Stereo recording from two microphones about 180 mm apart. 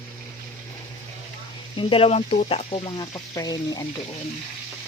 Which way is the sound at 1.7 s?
30° left (ahead or behind).